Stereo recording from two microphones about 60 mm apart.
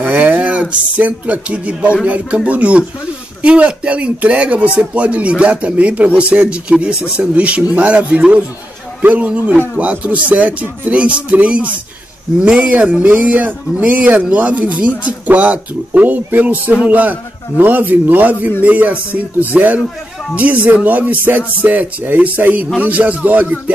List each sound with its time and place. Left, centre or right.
0.0 s speech: right